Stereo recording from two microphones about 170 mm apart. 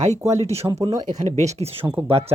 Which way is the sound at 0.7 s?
20° right (ahead or behind).